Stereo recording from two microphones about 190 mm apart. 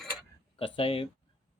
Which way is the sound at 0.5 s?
30° left (ahead or behind).